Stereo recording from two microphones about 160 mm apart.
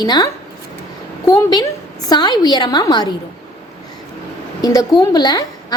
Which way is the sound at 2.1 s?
25° left (ahead or behind).